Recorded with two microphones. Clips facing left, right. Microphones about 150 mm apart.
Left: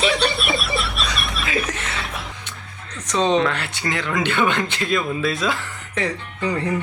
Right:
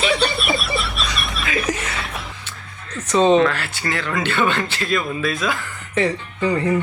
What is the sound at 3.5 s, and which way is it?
Speech, 20° left (ahead or behind).